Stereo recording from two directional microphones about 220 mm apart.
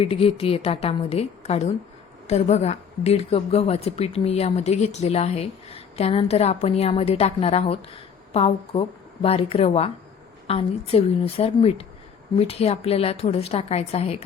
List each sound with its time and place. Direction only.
0.0 s a woman's voice: 25° left (ahead or behind)